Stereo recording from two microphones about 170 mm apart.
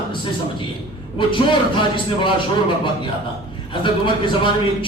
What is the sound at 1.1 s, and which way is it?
Speech, 30° left (ahead or behind).